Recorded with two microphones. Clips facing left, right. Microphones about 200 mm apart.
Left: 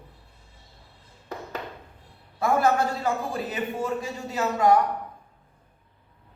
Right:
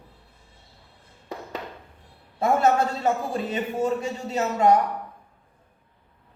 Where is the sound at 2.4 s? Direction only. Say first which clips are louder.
Right 2 dB; 25° right (ahead or behind).